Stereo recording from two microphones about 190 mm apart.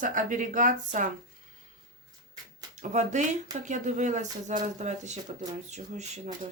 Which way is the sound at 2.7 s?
40° right (ahead or behind).